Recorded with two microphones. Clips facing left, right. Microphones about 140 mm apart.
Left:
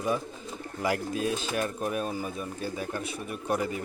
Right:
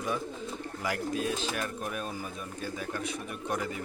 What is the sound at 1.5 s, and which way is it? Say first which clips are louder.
Speech: left 5 dB; 30° left (ahead or behind).